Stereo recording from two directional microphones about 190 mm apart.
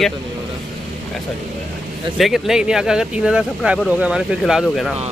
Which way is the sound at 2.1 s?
Centre (ahead or behind).